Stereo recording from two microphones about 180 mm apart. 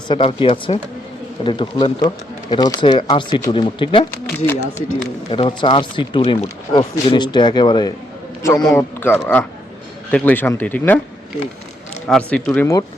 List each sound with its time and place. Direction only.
0.1 s a man's voice: 30° left (ahead or behind); by 11.0 s 10° left (ahead or behind)
12.0 s speech: 5° left (ahead or behind)